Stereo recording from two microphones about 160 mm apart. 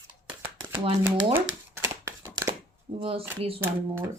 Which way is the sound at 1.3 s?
15° right (ahead or behind).